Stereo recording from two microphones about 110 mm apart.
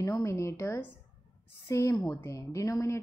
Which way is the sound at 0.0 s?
30° left (ahead or behind).